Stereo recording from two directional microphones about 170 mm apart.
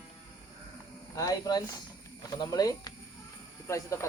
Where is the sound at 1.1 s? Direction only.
20° left (ahead or behind).